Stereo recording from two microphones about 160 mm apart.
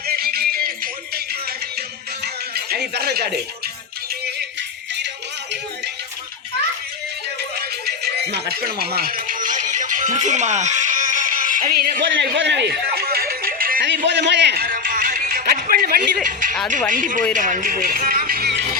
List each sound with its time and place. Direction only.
0.1 s music: 70° right (ahead or behind)
2.2 s music: 80° right
7.6 s music: 85° right; by 16.0 s 65° right (ahead or behind)
16.2 s speech: 55° right (ahead or behind); by 18.6 s 80° right